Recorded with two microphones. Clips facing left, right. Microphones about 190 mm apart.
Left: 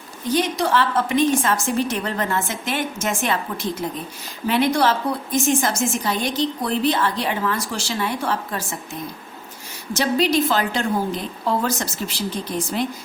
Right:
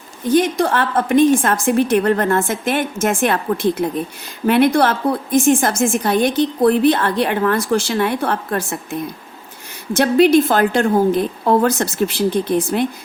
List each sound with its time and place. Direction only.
0.3 s a woman's voice: 50° right (ahead or behind)